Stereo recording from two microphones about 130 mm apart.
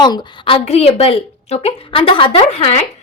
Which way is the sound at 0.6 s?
55° left (ahead or behind).